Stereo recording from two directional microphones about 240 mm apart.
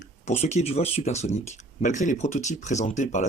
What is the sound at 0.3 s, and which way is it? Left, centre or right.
Speech, left.